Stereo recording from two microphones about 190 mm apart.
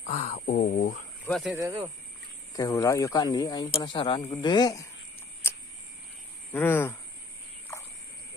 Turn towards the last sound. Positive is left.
turn(degrees=10)  # may be behind; listen again after turning